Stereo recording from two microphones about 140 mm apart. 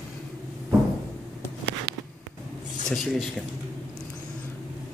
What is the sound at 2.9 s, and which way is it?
Speech, centre (ahead or behind).